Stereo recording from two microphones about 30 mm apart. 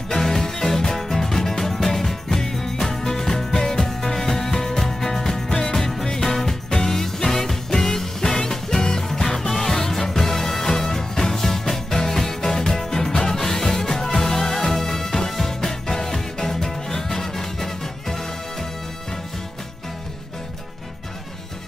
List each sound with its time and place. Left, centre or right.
0.1 s music: centre